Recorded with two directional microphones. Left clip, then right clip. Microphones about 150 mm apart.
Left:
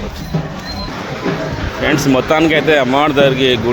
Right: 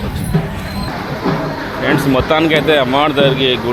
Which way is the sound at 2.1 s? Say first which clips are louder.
Left 1 dB; 35° left (ahead or behind).